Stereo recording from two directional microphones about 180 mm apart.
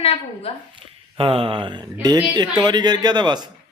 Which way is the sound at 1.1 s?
30° right (ahead or behind).